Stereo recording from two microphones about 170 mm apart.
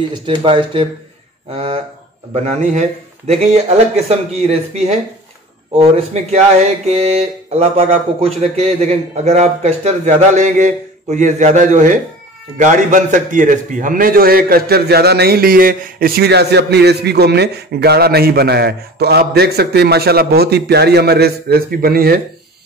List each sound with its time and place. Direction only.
0.3 s a man's voice: 30° right (ahead or behind)
6.9 s a man's voice: 40° right (ahead or behind); by 22.2 s 65° right (ahead or behind)